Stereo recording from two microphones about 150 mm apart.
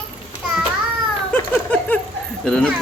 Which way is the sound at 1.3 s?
10° left (ahead or behind).